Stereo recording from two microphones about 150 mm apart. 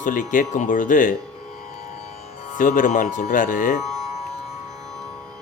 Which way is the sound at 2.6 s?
60° left (ahead or behind).